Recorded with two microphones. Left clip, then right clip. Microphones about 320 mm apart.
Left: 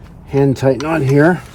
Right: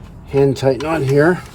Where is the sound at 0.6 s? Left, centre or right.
Left.